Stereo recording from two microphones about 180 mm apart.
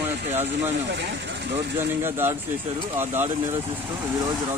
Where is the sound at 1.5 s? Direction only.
10° right (ahead or behind).